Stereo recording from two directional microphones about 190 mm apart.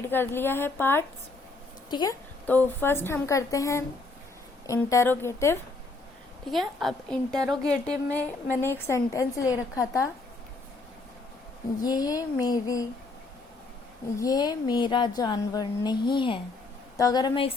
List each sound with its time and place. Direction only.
0.0 s a woman's voice: 10° left (ahead or behind)
1.9 s a woman's voice: 25° left (ahead or behind)
2.5 s a woman's voice: 10° left (ahead or behind)
6.5 s a woman's voice: centre (ahead or behind); by 10.1 s 15° left (ahead or behind)
11.8 s a woman's voice: 20° left (ahead or behind)
14.2 s a woman's voice: 20° left (ahead or behind)